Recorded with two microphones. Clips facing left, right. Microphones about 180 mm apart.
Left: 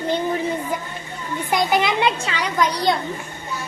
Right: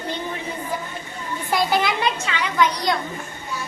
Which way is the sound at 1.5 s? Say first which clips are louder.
Left 1 dB; 20° left (ahead or behind).